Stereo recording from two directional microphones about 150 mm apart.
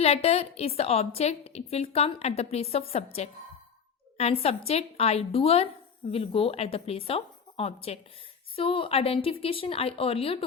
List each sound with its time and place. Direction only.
0.0 s a woman's voice: 40° left (ahead or behind)